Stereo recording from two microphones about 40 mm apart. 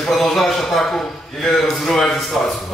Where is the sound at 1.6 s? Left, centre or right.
Centre.